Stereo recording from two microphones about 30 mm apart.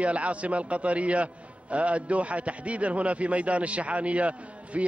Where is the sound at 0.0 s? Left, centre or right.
Right.